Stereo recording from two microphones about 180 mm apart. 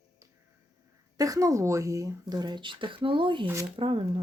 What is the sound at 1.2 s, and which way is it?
Speech, 20° right (ahead or behind).